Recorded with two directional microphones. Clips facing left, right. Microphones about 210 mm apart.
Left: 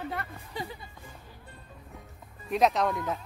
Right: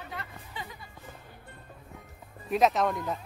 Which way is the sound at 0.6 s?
40° left (ahead or behind).